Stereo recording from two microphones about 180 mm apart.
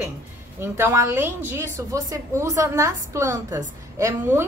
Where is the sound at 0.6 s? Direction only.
15° right (ahead or behind).